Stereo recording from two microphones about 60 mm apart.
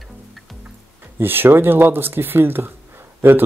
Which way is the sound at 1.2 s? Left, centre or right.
Right.